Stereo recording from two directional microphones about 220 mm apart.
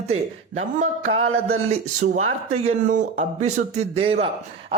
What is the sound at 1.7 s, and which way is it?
Speech, 30° right (ahead or behind).